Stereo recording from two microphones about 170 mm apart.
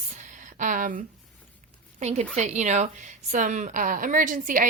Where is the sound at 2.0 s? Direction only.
40° right (ahead or behind).